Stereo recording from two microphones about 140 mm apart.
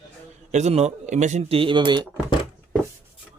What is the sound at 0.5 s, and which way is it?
Speech, 50° right (ahead or behind).